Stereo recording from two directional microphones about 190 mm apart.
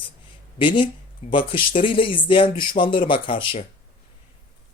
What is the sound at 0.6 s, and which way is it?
Speech, 25° left (ahead or behind).